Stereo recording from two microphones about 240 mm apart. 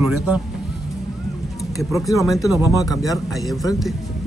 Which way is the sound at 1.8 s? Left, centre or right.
Centre.